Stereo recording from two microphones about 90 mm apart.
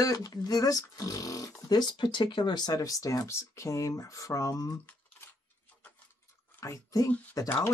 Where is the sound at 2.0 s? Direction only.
60° left (ahead or behind); by 4.7 s 40° left (ahead or behind).